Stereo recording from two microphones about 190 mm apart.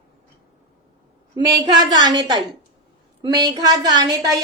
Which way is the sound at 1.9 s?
20° right (ahead or behind).